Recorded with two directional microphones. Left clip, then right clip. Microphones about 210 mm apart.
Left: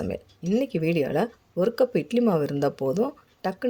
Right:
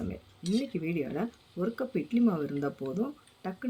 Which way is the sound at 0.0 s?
40° left (ahead or behind).